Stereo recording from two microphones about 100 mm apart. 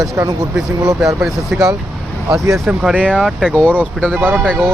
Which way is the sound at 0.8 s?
40° right (ahead or behind).